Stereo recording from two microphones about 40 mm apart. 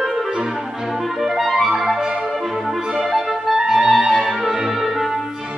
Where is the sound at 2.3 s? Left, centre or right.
Centre.